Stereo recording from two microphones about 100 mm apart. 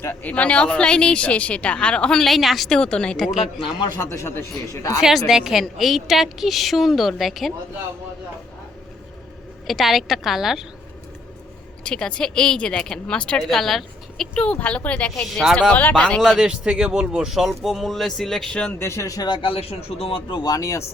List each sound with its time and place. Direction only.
0.0 s speech: 20° left (ahead or behind)
3.8 s speech: 45° left (ahead or behind)
4.1 s a man's voice: 30° left (ahead or behind)
4.9 s a woman's voice: centre (ahead or behind)
9.6 s a woman's voice: centre (ahead or behind)
11.8 s speech: 10° left (ahead or behind)
16.2 s a woman's voice: 5° right (ahead or behind)
18.8 s a man's voice: 30° left (ahead or behind)
19.3 s speech: 60° left (ahead or behind); by 20.8 s 30° left (ahead or behind)